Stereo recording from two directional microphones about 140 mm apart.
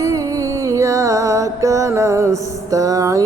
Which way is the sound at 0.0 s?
25° right (ahead or behind).